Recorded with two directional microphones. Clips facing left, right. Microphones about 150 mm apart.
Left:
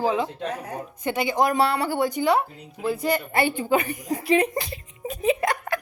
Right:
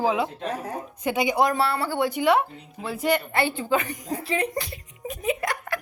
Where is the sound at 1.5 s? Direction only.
15° left (ahead or behind).